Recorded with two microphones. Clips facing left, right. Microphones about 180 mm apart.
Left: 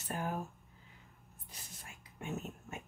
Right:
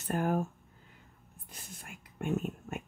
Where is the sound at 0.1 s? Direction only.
50° right (ahead or behind).